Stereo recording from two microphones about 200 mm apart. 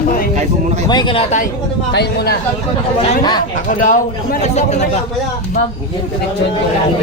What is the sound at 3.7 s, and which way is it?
Speech, 40° left (ahead or behind).